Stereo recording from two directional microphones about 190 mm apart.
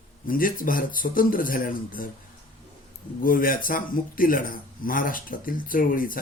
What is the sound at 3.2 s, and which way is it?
Speech, 45° left (ahead or behind).